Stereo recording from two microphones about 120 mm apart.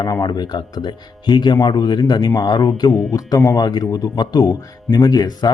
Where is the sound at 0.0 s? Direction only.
35° left (ahead or behind).